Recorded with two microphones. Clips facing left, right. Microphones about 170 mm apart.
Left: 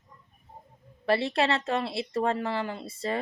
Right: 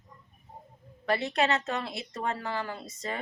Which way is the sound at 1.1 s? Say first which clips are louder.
Left 2 dB; 30° left (ahead or behind).